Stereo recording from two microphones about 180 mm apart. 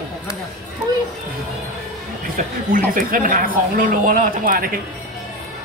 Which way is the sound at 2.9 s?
50° right (ahead or behind).